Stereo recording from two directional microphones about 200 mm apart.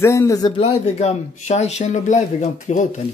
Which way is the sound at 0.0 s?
15° left (ahead or behind).